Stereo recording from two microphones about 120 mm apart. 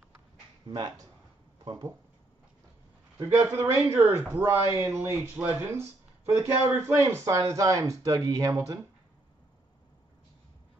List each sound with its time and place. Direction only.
0.7 s speech: 35° right (ahead or behind)
3.3 s speech: 20° right (ahead or behind)